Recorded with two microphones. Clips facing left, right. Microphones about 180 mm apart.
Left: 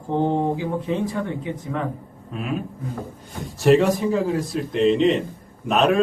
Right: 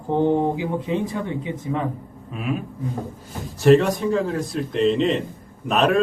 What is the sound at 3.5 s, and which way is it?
A man's voice, centre (ahead or behind).